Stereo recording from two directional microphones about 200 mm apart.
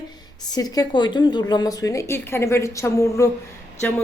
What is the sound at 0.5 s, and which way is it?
A woman's voice, 20° left (ahead or behind).